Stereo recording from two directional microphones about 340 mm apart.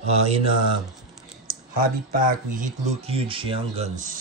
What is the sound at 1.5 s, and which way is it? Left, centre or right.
Speech, right.